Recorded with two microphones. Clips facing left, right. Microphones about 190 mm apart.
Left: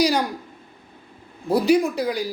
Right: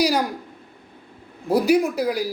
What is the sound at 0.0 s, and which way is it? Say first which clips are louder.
Speech: even; 5° right (ahead or behind).